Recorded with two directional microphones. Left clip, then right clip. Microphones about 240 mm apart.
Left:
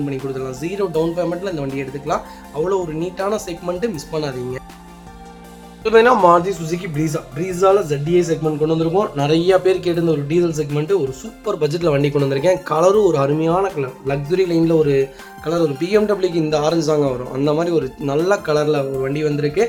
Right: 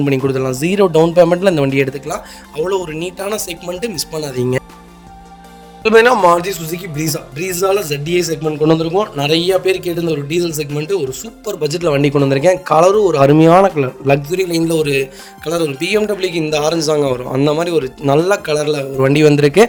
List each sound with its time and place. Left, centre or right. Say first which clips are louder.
0.3 s a man's voice: right 8 dB; right
5.8 s a man's voice: right 3 dB; right
10.1 s speech: right 1 dB; right
10.7 s a man's voice: even; centre
11.6 s speech: right 3 dB; right
14.3 s a man's voice: even; centre
15.4 s a man's voice: right 2 dB; right